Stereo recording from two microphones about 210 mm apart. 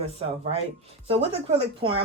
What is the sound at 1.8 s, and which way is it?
Speech, 25° right (ahead or behind).